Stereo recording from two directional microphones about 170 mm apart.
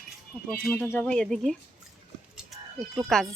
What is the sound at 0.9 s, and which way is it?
Speech, 5° left (ahead or behind).